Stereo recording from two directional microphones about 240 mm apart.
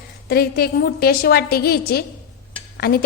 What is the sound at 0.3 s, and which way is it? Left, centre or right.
A woman's voice, left.